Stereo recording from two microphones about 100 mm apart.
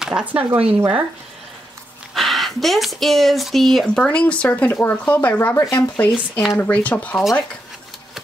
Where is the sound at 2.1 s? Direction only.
Centre (ahead or behind).